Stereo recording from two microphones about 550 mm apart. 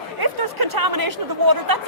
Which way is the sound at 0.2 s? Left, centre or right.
Right.